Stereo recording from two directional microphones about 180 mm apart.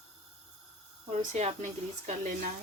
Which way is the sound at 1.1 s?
35° right (ahead or behind).